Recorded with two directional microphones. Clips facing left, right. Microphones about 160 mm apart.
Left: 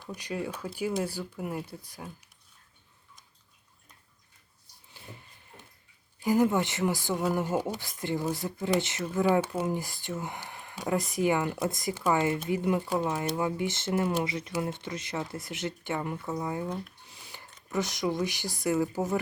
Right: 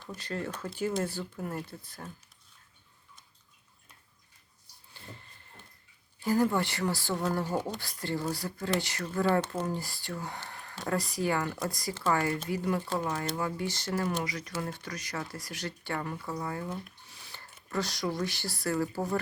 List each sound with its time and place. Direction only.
0.0 s speech: 15° left (ahead or behind)
4.9 s snort: 10° left (ahead or behind)
6.2 s speech: 15° left (ahead or behind)
17.3 s a sound: 15° left (ahead or behind)
17.7 s speech: 20° left (ahead or behind)